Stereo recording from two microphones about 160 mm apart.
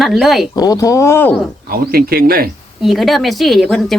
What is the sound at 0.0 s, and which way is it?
Speech, centre (ahead or behind).